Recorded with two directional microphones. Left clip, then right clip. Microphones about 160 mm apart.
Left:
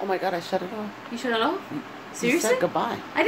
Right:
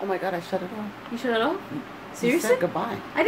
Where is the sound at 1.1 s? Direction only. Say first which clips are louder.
Even; centre (ahead or behind).